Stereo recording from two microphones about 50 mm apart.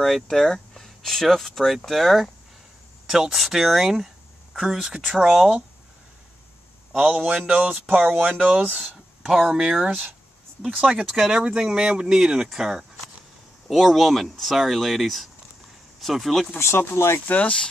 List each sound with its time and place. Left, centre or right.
0.0 s speech: centre
7.0 s speech: right
9.2 s speech: centre
16.5 s speech: left
17.3 s speech: left